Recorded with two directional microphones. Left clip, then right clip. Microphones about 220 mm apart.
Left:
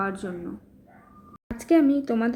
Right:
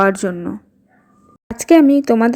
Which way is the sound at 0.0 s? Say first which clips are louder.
Right 14 dB; 40° right (ahead or behind).